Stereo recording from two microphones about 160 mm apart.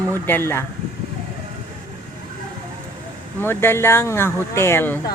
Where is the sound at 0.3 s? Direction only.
15° left (ahead or behind).